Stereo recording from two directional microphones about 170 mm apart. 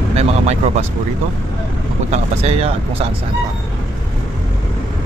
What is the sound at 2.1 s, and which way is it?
Speech, 40° right (ahead or behind).